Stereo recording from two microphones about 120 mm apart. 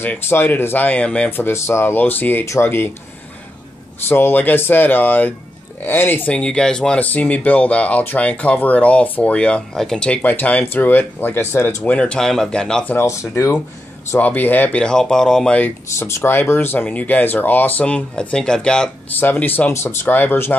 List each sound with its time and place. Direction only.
0.0 s speech: 20° left (ahead or behind)
4.1 s speech: 15° left (ahead or behind)
12.9 s speech: 25° left (ahead or behind)
14.1 s speech: 15° left (ahead or behind)